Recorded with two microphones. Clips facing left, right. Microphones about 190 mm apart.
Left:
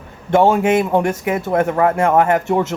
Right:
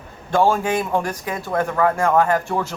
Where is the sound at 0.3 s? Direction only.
20° left (ahead or behind).